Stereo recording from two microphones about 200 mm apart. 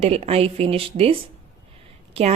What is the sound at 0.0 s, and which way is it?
A woman's voice, 30° right (ahead or behind).